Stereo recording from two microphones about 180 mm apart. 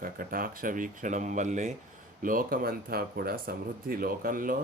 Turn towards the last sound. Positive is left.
turn(degrees=-50)  # may be behind; listen again after turning